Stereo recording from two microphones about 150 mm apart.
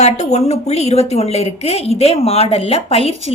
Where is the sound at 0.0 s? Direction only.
45° left (ahead or behind).